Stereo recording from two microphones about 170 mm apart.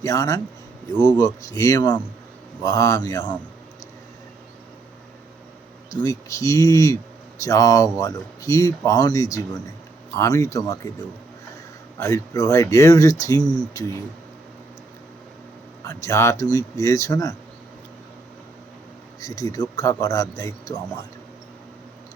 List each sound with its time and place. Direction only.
0.0 s speech: 20° left (ahead or behind)
5.9 s speech: 20° left (ahead or behind)
11.9 s speech: 20° left (ahead or behind)
15.8 s speech: 15° left (ahead or behind)
19.2 s speech: 20° left (ahead or behind)